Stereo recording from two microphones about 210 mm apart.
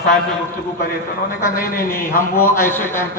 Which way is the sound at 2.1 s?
45° left (ahead or behind).